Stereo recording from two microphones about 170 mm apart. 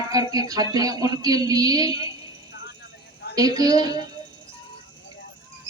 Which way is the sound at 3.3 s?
20° right (ahead or behind).